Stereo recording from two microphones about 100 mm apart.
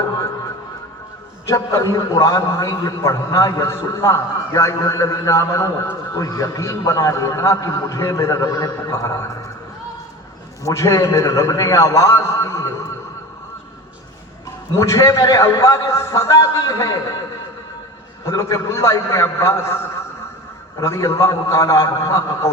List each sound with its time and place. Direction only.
1.5 s a man's voice: 30° left (ahead or behind)
10.7 s a man's voice: 35° left (ahead or behind)
14.8 s a man's voice: 30° left (ahead or behind)
18.3 s a man's voice: 35° left (ahead or behind)